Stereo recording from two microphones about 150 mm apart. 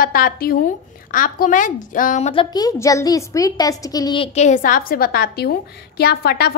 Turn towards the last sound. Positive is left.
turn(degrees=90)